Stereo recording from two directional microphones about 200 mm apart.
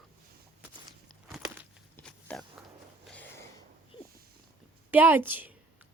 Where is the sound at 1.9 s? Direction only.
5° left (ahead or behind).